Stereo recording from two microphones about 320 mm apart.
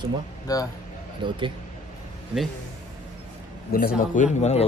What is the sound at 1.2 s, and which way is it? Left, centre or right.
Speech, centre.